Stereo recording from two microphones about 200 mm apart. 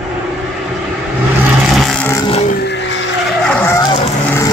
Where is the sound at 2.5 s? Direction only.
60° left (ahead or behind).